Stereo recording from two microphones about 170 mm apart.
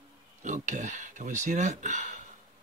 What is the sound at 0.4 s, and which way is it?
Speech, 45° right (ahead or behind).